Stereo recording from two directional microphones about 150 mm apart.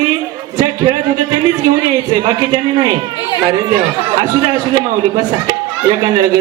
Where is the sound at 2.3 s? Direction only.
25° right (ahead or behind).